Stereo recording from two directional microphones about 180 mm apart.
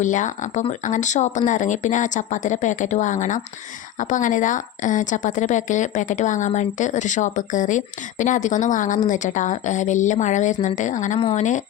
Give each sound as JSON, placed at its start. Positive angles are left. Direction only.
{"t": 0.0, "sound": "a woman's voice", "side_deg": 45}